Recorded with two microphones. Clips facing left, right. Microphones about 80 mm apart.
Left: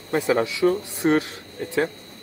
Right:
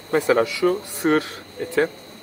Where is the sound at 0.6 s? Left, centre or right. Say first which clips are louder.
Left 2 dB; centre.